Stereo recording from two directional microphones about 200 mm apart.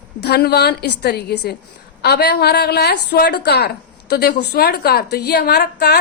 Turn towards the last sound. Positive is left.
turn(degrees=55)  # may be behind; listen again after turning